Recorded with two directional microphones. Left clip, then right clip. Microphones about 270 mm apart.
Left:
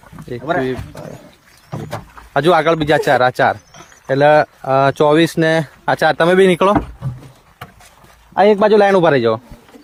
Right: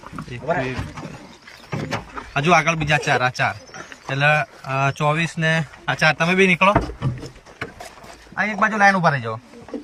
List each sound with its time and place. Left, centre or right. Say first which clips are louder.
2.3 s speech: left 5 dB; left
8.4 s speech: left 8 dB; left